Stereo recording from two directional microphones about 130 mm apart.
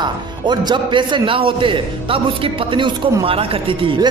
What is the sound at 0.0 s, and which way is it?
Speech, 35° right (ahead or behind).